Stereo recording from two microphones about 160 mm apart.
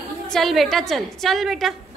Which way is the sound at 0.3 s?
Centre (ahead or behind).